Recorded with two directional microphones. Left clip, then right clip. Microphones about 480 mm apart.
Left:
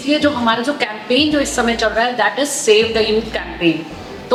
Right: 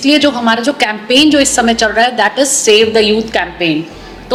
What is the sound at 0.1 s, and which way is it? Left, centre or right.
A woman's voice, right.